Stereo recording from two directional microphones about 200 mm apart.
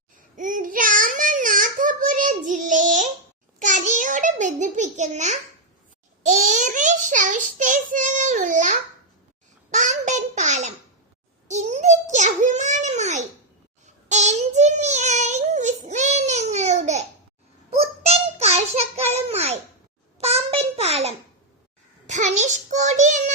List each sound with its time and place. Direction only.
0.3 s child singing: 40° right (ahead or behind)
3.6 s a sound: 40° right (ahead or behind)
6.2 s a child's voice: 40° right (ahead or behind)